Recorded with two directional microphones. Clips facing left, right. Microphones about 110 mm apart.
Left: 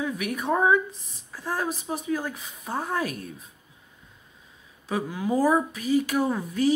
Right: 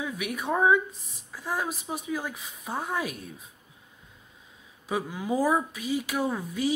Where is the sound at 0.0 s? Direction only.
5° right (ahead or behind).